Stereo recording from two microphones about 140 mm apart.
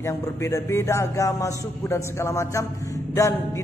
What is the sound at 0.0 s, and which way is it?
Speech, 20° left (ahead or behind).